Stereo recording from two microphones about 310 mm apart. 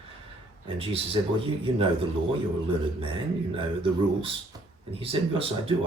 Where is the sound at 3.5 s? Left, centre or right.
Centre.